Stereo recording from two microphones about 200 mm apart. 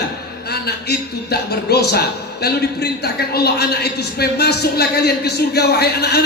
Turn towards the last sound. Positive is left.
turn(degrees=55)  # may be behind; listen again after turning